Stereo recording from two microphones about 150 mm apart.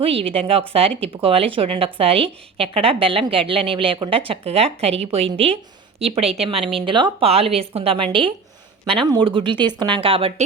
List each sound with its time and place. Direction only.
0.0 s a woman's voice: 40° right (ahead or behind)